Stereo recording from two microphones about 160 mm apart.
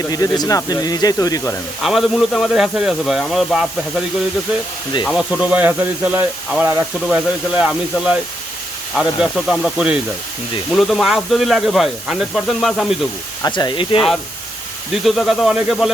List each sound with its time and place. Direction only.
0.0 s speech: 25° left (ahead or behind)
1.8 s speech: centre (ahead or behind)
5.0 s speech: 5° right (ahead or behind)
7.1 s speech: 5° right (ahead or behind)
13.4 s speech: 25° left (ahead or behind)
15.0 s speech: centre (ahead or behind)